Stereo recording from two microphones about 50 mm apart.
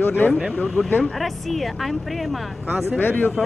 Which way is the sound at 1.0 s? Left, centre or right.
Centre.